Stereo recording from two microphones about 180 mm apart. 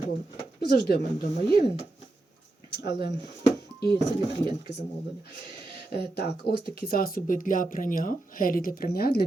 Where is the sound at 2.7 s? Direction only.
65° left (ahead or behind).